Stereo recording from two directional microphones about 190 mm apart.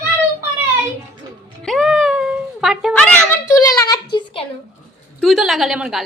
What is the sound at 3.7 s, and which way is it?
Speech, 20° left (ahead or behind).